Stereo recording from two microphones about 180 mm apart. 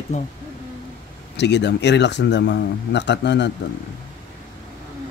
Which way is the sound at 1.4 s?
75° left (ahead or behind).